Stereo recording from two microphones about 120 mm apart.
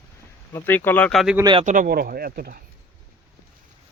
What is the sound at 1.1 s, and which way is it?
Speech, centre (ahead or behind).